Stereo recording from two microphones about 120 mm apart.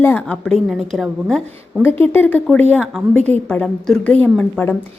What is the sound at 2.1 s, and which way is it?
Speech, 15° left (ahead or behind).